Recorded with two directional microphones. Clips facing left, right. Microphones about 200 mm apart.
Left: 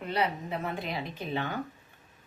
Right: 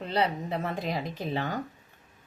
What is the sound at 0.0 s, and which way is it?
Speech, 30° right (ahead or behind).